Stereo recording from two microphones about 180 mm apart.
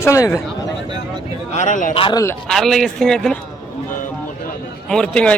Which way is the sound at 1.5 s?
45° left (ahead or behind).